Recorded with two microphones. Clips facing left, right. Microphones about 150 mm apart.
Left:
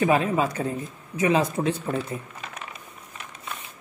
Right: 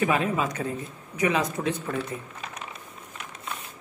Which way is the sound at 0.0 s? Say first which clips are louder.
Left 3 dB; 35° left (ahead or behind).